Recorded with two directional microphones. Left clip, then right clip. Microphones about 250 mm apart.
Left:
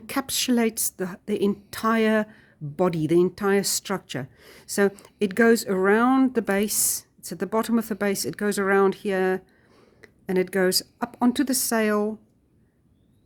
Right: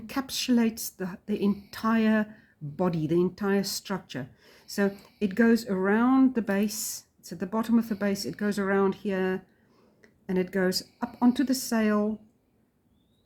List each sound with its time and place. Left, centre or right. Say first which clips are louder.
0.1 s speech: left 4 dB; left